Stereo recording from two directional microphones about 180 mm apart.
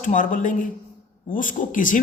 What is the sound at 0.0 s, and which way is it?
A man's voice, 45° left (ahead or behind).